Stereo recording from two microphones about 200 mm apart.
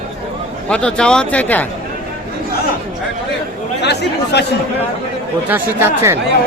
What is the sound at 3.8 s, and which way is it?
Speech, 55° left (ahead or behind).